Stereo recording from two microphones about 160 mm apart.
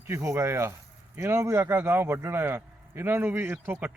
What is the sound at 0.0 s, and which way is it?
Speech, 15° right (ahead or behind).